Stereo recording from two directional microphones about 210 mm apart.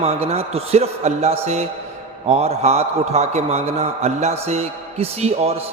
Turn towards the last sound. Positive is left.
turn(degrees=-30)  # may be behind; listen again after turning